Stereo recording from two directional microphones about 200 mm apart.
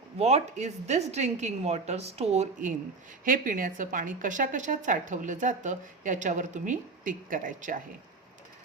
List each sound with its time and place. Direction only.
0.2 s a woman's voice: 30° right (ahead or behind)